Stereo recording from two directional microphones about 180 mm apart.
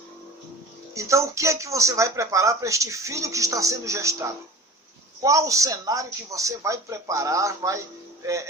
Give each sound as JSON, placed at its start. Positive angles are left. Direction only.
{"t": 0.9, "sound": "speech", "side_deg": -15}